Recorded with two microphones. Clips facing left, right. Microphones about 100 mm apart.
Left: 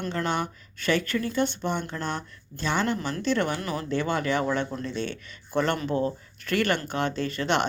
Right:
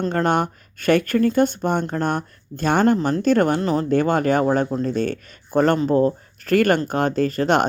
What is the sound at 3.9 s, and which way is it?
Speech, 45° right (ahead or behind).